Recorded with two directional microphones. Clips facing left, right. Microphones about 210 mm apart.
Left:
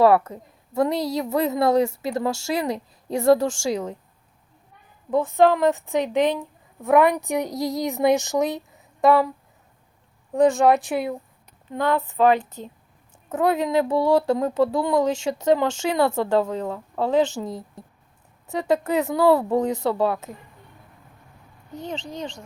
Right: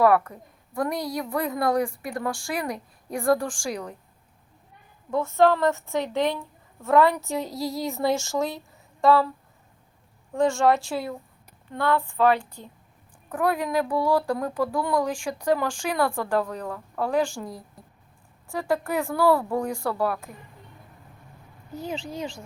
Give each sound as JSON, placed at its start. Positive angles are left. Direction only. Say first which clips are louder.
{"t": 0.0, "sound": "speech", "louder": "left 3 dB", "side_deg": 25}
{"t": 5.1, "sound": "a woman's voice", "louder": "left 2 dB", "side_deg": 15}
{"t": 10.3, "sound": "speech", "louder": "left 4 dB", "side_deg": 20}
{"t": 21.7, "sound": "speech", "louder": "even", "side_deg": -10}